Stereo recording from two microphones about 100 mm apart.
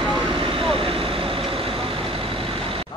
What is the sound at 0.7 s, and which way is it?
Vehicle, 65° right (ahead or behind).